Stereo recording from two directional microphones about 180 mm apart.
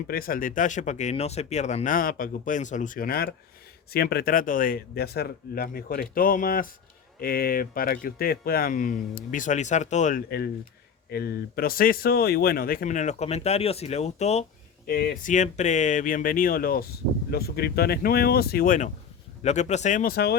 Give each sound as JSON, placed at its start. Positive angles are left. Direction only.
{"t": 0.1, "sound": "speech", "side_deg": 55}
{"t": 10.2, "sound": "speech", "side_deg": 60}
{"t": 14.8, "sound": "speech", "side_deg": 55}
{"t": 19.4, "sound": "speech", "side_deg": 40}